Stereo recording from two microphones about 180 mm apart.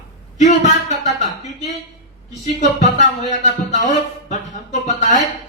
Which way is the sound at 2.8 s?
40° left (ahead or behind).